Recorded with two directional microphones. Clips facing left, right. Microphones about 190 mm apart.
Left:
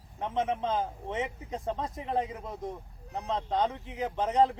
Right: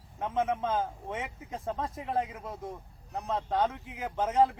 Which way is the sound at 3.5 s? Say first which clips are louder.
Even; 15° left (ahead or behind).